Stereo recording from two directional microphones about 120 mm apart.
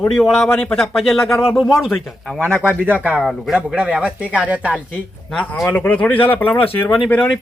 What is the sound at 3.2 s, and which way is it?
Speech, centre (ahead or behind).